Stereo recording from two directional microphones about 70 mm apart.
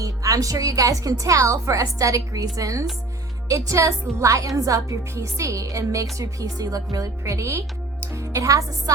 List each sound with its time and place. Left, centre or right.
0.0 s a woman's voice: right